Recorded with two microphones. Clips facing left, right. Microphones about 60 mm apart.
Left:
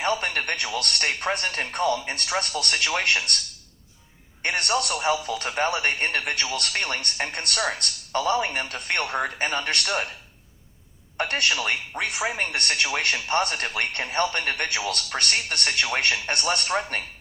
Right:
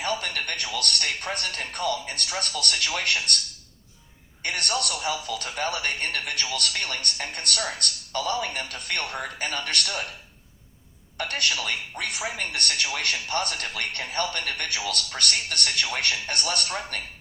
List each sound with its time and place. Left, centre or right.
0.0 s speech: left
4.4 s speech: left
11.2 s speech: left